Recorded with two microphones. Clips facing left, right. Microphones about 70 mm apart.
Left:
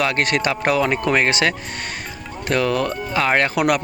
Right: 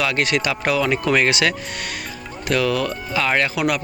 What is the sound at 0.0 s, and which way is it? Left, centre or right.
Speech, left.